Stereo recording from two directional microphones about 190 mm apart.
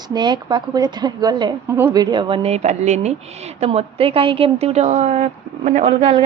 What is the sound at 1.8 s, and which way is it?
Speech, 10° right (ahead or behind).